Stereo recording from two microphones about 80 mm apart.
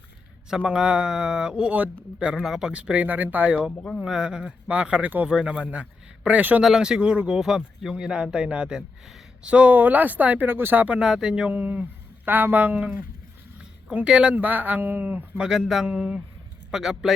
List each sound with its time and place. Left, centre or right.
0.5 s speech: centre
2.1 s speech: centre
6.6 s speech: centre; by 15.2 s right
15.4 s speech: centre